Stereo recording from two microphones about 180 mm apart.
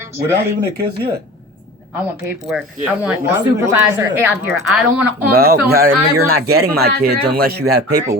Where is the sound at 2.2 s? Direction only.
5° right (ahead or behind).